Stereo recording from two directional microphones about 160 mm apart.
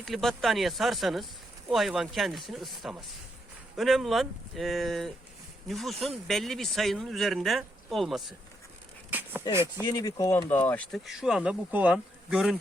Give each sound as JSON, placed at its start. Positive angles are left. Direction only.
{"t": 0.0, "sound": "speech", "side_deg": 0}
{"t": 9.0, "sound": "a sound", "side_deg": -10}
{"t": 9.8, "sound": "speech", "side_deg": 25}